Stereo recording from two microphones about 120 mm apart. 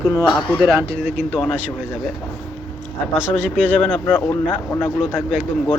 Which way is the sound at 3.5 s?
10° left (ahead or behind).